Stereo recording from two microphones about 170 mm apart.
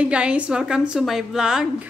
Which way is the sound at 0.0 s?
5° right (ahead or behind).